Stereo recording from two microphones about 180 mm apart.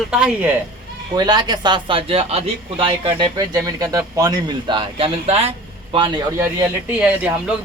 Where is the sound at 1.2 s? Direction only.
25° right (ahead or behind).